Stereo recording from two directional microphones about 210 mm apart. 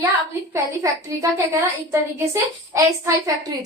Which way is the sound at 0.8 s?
15° right (ahead or behind).